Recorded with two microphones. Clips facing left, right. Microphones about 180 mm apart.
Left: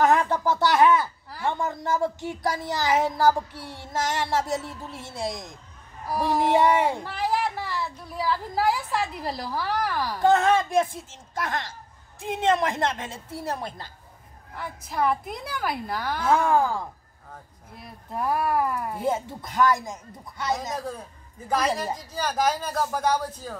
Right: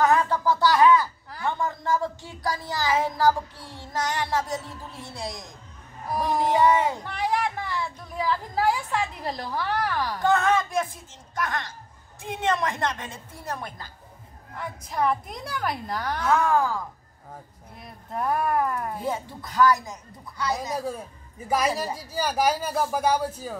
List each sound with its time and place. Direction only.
0.0 s speech: 25° left (ahead or behind)
7.0 s speech: 5° left (ahead or behind)
10.2 s speech: 25° left (ahead or behind)
14.6 s speech: 5° left (ahead or behind)
16.5 s speech: 30° left (ahead or behind)
18.1 s speech: 5° left (ahead or behind)
18.9 s speech: 25° left (ahead or behind)
20.7 s speech: 10° right (ahead or behind)